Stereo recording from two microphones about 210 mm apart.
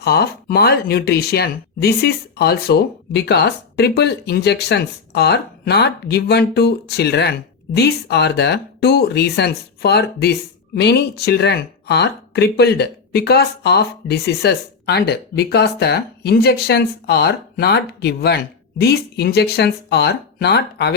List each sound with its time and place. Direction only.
0.0 s speech: 50° left (ahead or behind)